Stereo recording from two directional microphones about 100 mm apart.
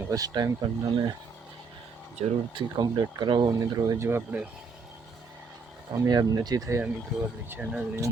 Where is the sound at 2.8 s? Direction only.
50° right (ahead or behind).